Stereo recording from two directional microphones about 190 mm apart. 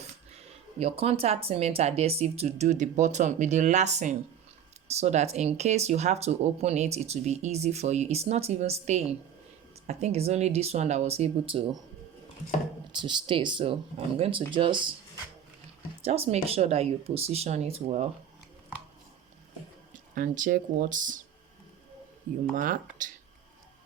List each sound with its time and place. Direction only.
0.8 s speech: 30° right (ahead or behind)
13.0 s speech: 25° right (ahead or behind)
16.0 s speech: 30° right (ahead or behind)
19.9 s speech: 45° right (ahead or behind)
22.5 s speech: 45° right (ahead or behind)